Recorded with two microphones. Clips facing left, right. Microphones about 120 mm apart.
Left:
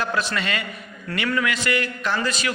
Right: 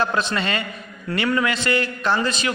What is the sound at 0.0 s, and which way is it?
A man's voice, 25° right (ahead or behind).